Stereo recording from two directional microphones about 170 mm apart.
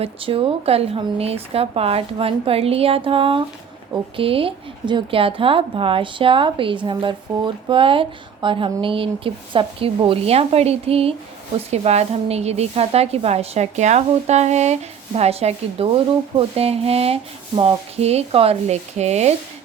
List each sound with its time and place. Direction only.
0.0 s a woman's voice: 30° right (ahead or behind)